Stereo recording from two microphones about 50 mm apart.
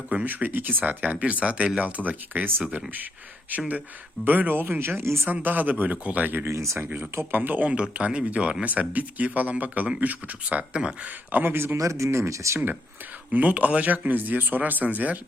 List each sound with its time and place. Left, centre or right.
0.1 s speech: right
4.3 s speech: right
5.3 s speech: right
6.5 s speech: right
6.8 s speech: right
7.8 s speech: right
8.6 s speech: right
11.5 s speech: right
13.3 s speech: right